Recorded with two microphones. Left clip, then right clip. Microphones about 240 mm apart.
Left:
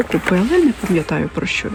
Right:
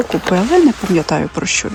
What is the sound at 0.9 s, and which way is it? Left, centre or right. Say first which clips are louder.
Speech: right 3 dB; centre.